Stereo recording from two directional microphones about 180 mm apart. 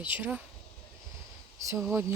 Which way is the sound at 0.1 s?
10° right (ahead or behind).